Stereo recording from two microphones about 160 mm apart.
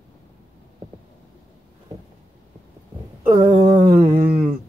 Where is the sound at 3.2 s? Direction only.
20° right (ahead or behind).